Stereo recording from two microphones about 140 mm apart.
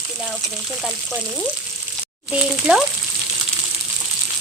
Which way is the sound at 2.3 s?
5° right (ahead or behind).